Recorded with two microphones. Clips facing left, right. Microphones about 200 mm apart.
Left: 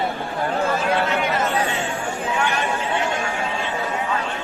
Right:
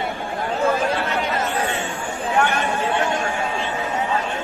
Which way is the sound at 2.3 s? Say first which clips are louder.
Right 5 dB; 50° right (ahead or behind).